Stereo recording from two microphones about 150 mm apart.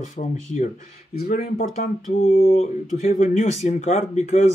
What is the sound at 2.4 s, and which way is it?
Speech, 40° left (ahead or behind).